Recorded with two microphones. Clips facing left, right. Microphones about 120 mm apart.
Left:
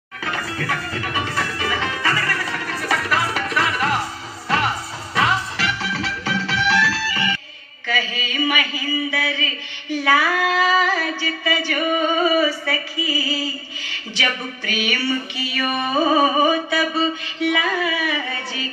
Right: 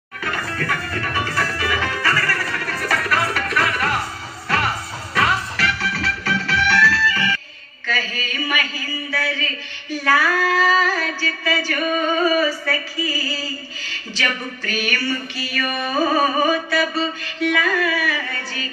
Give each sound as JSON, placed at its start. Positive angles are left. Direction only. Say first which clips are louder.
{"t": 0.2, "sound": "music", "louder": "right 1 dB", "side_deg": 20}
{"t": 7.8, "sound": "a sound", "louder": "left 1 dB", "side_deg": 20}
{"t": 15.5, "sound": "carnatic music", "louder": "left 2 dB", "side_deg": 20}
{"t": 17.5, "sound": "carnatic music", "louder": "right 1 dB", "side_deg": 20}